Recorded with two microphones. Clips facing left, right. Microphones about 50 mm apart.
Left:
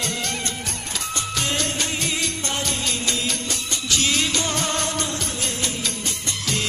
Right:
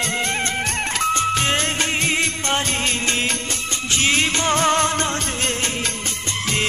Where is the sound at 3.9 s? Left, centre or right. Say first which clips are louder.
Right 3 dB; right.